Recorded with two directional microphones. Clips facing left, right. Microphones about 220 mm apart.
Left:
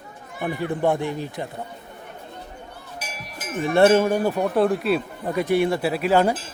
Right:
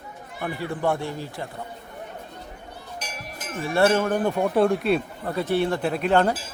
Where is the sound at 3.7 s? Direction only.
20° left (ahead or behind); by 5.0 s centre (ahead or behind).